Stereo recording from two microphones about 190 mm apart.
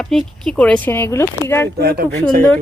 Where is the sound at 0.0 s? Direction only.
Centre (ahead or behind).